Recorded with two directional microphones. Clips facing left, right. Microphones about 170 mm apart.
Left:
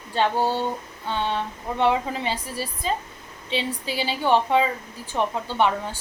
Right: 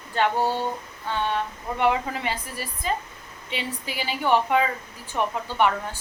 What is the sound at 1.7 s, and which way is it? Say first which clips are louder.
A woman's voice: left 1 dB; 25° left (ahead or behind).